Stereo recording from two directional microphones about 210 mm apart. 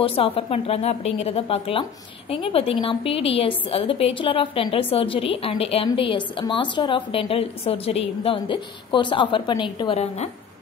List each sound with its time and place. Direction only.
0.0 s a woman's voice: 25° left (ahead or behind)